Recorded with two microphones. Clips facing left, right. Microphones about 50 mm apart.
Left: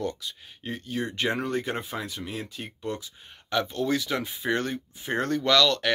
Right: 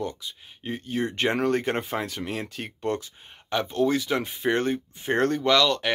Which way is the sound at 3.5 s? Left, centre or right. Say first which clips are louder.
Right 2 dB; right.